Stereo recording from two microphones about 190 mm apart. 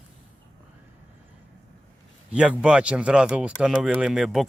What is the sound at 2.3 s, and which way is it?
Speech, 5° right (ahead or behind).